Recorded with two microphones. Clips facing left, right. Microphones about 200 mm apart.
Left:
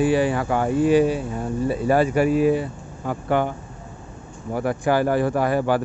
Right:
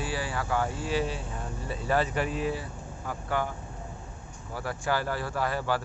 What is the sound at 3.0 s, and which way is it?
Speech, 65° left (ahead or behind).